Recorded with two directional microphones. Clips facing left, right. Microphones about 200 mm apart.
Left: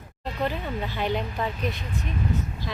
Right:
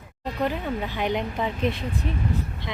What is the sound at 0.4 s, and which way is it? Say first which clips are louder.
Speech: right 2 dB; 15° right (ahead or behind).